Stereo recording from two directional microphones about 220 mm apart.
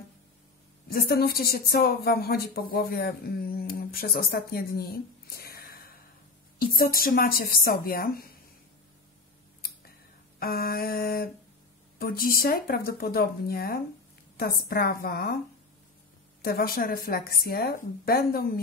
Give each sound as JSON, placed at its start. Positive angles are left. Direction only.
{"t": 0.8, "sound": "a woman's voice", "side_deg": 45}
{"t": 10.4, "sound": "a woman's voice", "side_deg": 45}
{"t": 16.4, "sound": "a woman's voice", "side_deg": 45}